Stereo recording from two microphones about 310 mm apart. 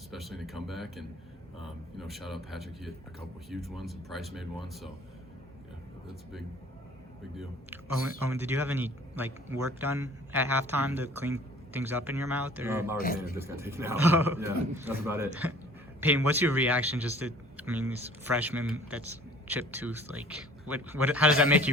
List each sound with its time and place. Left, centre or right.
0.1 s speech: centre
8.3 s a man's voice: centre